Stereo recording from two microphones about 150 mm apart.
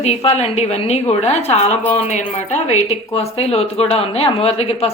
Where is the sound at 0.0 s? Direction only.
40° left (ahead or behind).